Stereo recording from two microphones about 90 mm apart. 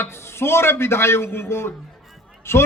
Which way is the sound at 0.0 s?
30° left (ahead or behind).